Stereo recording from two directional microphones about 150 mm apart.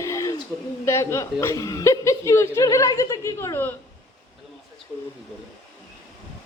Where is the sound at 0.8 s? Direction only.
20° left (ahead or behind).